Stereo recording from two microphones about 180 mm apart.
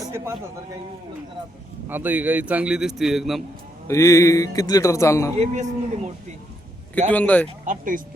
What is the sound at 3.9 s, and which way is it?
A man's voice, 15° left (ahead or behind).